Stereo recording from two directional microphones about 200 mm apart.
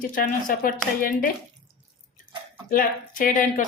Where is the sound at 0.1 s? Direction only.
45° left (ahead or behind).